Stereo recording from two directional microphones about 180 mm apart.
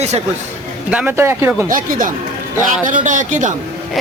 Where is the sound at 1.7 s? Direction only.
50° right (ahead or behind).